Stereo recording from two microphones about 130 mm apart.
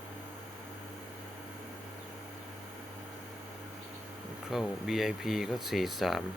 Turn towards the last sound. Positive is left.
turn(degrees=0)  # may be behind; listen again after turning